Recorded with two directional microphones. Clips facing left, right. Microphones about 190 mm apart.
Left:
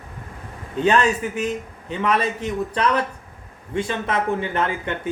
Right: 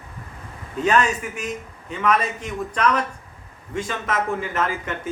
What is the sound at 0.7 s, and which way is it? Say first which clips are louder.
A man's voice: left 2 dB; 30° left (ahead or behind).